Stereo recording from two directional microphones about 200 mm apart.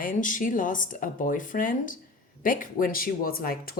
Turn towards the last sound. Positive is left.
turn(degrees=45)  # may be behind; listen again after turning